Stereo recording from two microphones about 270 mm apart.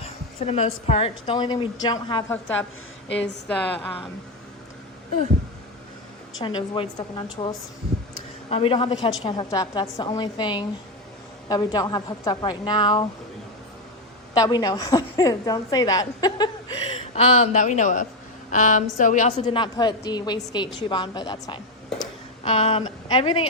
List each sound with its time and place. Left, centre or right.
0.0 s a sound: left
0.9 s a woman's voice: left
3.1 s a woman's voice: left
3.5 s a woman's voice: centre
6.4 s a woman's voice: centre
14.3 s a woman's voice: centre